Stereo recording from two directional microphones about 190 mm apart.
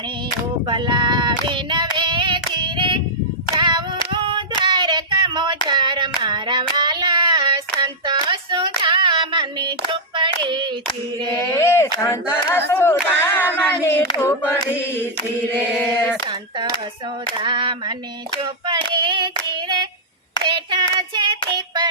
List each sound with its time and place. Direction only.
0.7 s child singing: 25° right (ahead or behind)
2.5 s female singing: 25° right (ahead or behind)
3.5 s clapping: 25° right (ahead or behind)
4.6 s child singing: 25° right (ahead or behind)
5.6 s hands: 25° right (ahead or behind)
6.2 s child singing: 25° right (ahead or behind)
11.4 s a sound: 15° left (ahead or behind)
12.7 s speech: 10° left (ahead or behind)
13.8 s a sound: 15° left (ahead or behind)
17.3 s a sound: 25° right (ahead or behind)
18.9 s hands: 25° right (ahead or behind)
20.4 s child singing: 25° right (ahead or behind)